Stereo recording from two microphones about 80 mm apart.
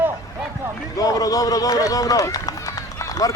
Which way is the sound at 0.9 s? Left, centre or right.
Left.